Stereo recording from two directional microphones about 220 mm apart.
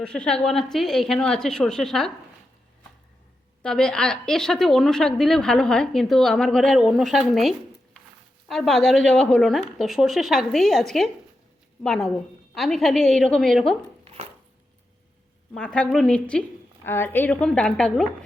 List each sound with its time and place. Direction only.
0.0 s a woman's voice: 5° left (ahead or behind)
3.6 s a woman's voice: 5° left (ahead or behind)
14.0 s dog: 30° right (ahead or behind)
15.5 s a woman's voice: 5° left (ahead or behind)